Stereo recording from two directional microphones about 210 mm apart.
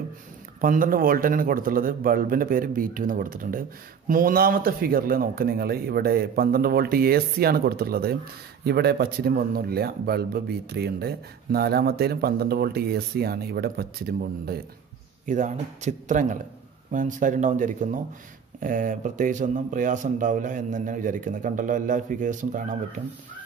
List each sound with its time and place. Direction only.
0.6 s speech: 40° right (ahead or behind)
15.2 s speech: 35° right (ahead or behind)